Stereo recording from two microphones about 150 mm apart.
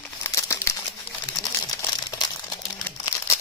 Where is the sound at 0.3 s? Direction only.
20° left (ahead or behind).